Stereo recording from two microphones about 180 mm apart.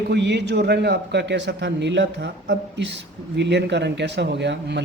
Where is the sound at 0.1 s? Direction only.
70° right (ahead or behind).